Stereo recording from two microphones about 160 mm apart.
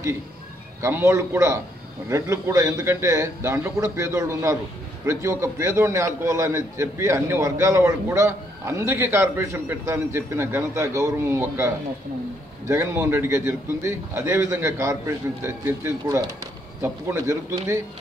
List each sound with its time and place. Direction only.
0.8 s a man's voice: 15° right (ahead or behind)